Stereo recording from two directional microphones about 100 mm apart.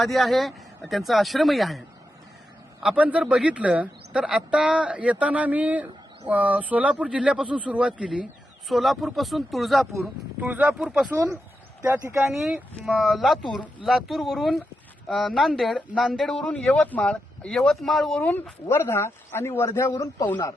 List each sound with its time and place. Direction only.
0.0 s speech: centre (ahead or behind)
2.9 s speech: 15° right (ahead or behind)
10.4 s speech: 20° right (ahead or behind)
10.8 s speech: 5° right (ahead or behind)
11.9 s speech: 25° right (ahead or behind)
12.8 s speech: centre (ahead or behind)
18.2 s speech: 20° left (ahead or behind)
20.2 s speech: 20° left (ahead or behind)